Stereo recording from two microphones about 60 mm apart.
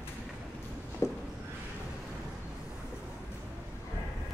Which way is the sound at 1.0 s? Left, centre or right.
Left.